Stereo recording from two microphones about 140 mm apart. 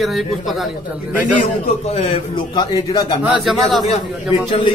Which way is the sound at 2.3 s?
30° left (ahead or behind).